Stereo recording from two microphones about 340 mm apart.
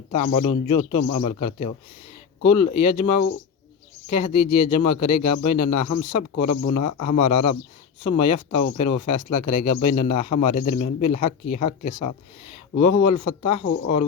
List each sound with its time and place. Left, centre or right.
0.1 s speech: left